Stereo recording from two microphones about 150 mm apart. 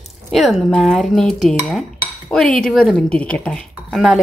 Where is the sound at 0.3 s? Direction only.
Centre (ahead or behind).